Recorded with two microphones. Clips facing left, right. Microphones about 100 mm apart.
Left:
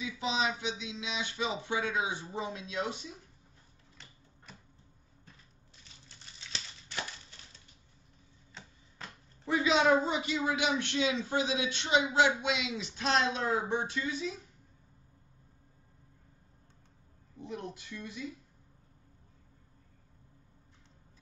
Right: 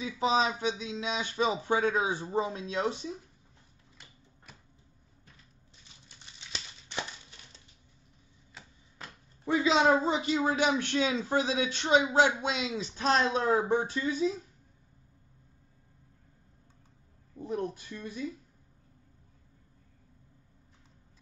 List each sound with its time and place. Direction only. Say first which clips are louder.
0.0 s a man's voice: right 5 dB; 40° right (ahead or behind)
4.5 s a sound: left 1 dB; 5° right (ahead or behind)
6.0 s crumpling: even; 20° right (ahead or behind)
8.5 s a sound: even; 5° right (ahead or behind)
9.5 s a man's voice: right 2 dB; 30° right (ahead or behind)
17.4 s speech: right 7 dB; 40° right (ahead or behind)